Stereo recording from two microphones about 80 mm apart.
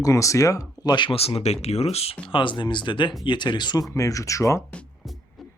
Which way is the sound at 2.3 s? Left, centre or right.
Left.